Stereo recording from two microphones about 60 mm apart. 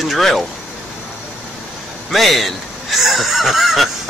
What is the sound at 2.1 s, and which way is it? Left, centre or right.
A man's voice, centre.